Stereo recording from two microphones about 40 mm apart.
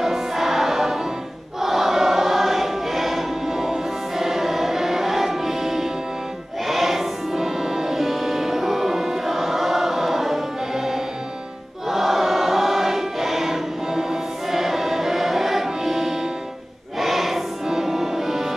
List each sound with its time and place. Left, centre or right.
0.0 s music: centre
1.6 s choir: centre
6.7 s music: centre
11.9 s choir: centre
14.5 s music: centre